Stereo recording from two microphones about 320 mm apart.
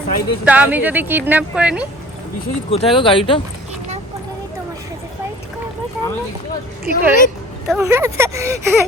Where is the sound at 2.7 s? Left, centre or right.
Centre.